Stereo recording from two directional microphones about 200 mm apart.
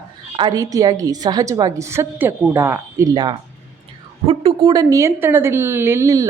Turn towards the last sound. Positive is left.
turn(degrees=-15)  # may be behind; listen again after turning